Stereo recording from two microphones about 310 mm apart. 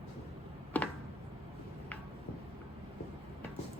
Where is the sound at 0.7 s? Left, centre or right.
Centre.